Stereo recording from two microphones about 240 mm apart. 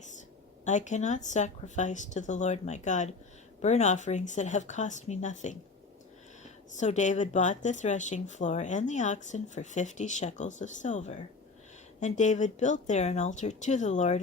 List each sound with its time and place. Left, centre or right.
0.6 s speech: left
6.7 s speech: left